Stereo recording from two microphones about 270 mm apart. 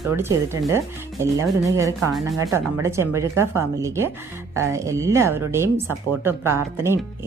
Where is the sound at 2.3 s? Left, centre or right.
Centre.